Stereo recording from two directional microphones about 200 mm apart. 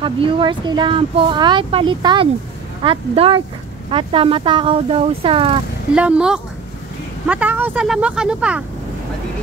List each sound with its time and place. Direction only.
0.0 s speech: 25° right (ahead or behind)
5.9 s speech: 5° right (ahead or behind)